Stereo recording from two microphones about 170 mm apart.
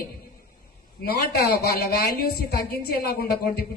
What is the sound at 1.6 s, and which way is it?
Speech, 65° left (ahead or behind).